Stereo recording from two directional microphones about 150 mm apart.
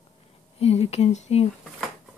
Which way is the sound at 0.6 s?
45° left (ahead or behind).